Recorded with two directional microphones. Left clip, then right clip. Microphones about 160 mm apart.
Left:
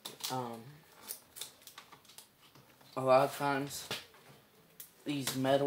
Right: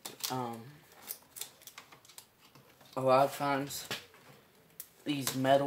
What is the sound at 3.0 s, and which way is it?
Speech, 55° right (ahead or behind).